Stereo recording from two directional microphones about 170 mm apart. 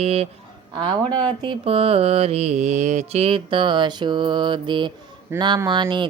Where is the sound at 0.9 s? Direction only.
25° right (ahead or behind).